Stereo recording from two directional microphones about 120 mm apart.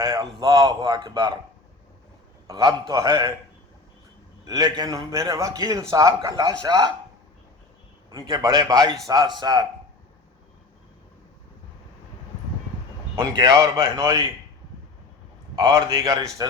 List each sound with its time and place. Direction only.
0.0 s a man's voice: 30° right (ahead or behind)
2.5 s a man's voice: 30° right (ahead or behind)
4.4 s a man's voice: 30° right (ahead or behind)
8.1 s a man's voice: 30° right (ahead or behind)
13.3 s a man's voice: 30° right (ahead or behind)
15.5 s a man's voice: 35° right (ahead or behind)